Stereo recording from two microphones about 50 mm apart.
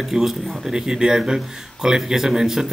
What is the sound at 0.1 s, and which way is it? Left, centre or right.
Speech, centre.